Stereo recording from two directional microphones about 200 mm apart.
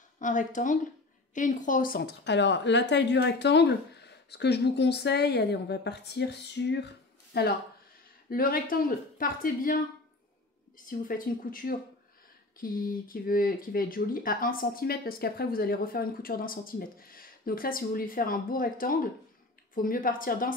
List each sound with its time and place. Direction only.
0.2 s a woman's voice: 40° left (ahead or behind)
10.9 s speech: 45° left (ahead or behind)